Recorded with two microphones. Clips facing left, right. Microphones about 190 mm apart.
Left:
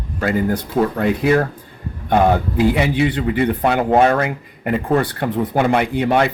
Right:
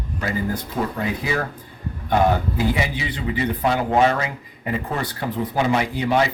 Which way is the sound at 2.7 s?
60° left (ahead or behind).